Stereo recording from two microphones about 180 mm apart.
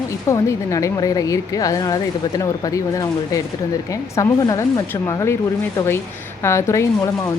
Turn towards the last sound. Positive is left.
turn(degrees=15)  # may be behind; listen again after turning